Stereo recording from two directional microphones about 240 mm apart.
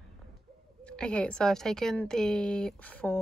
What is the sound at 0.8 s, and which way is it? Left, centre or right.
A woman's voice, centre.